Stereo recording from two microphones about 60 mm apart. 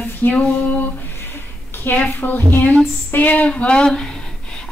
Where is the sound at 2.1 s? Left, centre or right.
Left.